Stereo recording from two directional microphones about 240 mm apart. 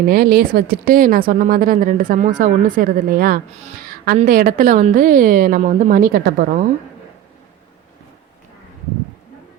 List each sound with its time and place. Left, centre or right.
0.1 s a woman's voice: right